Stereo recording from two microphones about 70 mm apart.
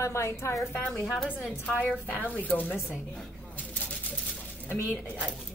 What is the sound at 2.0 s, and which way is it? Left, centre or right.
Speech, left.